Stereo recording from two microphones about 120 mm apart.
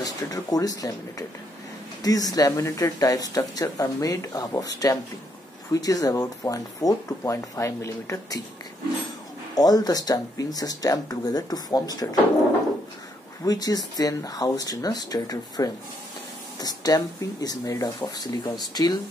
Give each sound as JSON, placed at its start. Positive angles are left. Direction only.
{"t": 0.0, "sound": "speech", "side_deg": 30}
{"t": 9.6, "sound": "speech", "side_deg": 30}
{"t": 13.5, "sound": "speech", "side_deg": 30}